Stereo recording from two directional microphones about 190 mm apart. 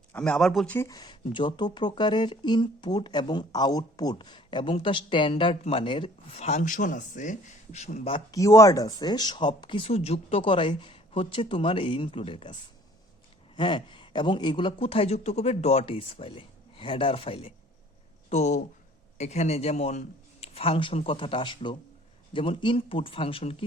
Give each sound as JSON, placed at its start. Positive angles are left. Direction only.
{"t": 0.1, "sound": "speech", "side_deg": 5}
{"t": 8.3, "sound": "speech", "side_deg": 15}
{"t": 13.6, "sound": "a man's voice", "side_deg": 25}